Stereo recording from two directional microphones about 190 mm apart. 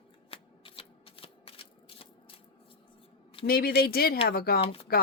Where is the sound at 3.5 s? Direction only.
50° left (ahead or behind).